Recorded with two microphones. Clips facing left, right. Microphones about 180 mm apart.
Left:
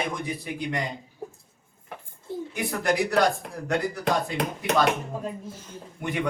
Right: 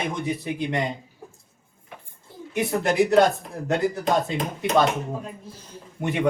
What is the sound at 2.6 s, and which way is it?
Speech, 25° right (ahead or behind).